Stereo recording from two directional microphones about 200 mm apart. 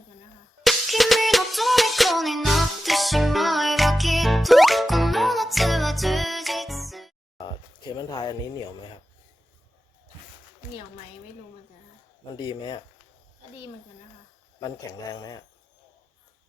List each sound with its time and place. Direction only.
0.6 s music: centre (ahead or behind)
7.3 s a sound: 20° left (ahead or behind)
12.3 s speech: 25° left (ahead or behind)
14.6 s speech: 20° left (ahead or behind)